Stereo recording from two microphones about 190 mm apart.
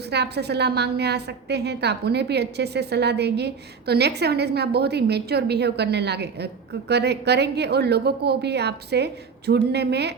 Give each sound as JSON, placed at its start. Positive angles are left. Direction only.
{"t": 0.1, "sound": "a woman's voice", "side_deg": -60}